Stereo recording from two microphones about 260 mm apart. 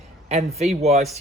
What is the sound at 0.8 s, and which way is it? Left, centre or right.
Speech, right.